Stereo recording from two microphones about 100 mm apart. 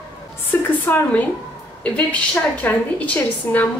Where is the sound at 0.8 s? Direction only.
15° left (ahead or behind).